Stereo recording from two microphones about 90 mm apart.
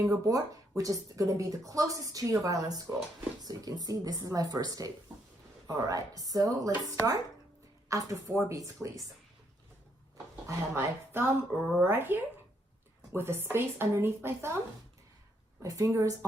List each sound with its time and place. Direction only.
0.0 s a woman's voice: 40° right (ahead or behind)
10.4 s speech: 25° right (ahead or behind)
15.6 s a woman's voice: 40° right (ahead or behind)